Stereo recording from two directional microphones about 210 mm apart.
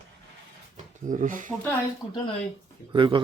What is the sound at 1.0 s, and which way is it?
Speech, 40° right (ahead or behind).